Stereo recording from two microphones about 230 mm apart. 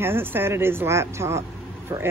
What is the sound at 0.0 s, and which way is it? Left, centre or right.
Speech, centre.